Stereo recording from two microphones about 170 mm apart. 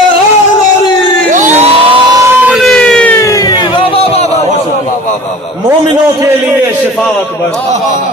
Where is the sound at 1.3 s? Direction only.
45° right (ahead or behind).